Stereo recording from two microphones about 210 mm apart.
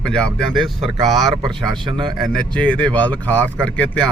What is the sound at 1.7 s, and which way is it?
Speech, 25° right (ahead or behind).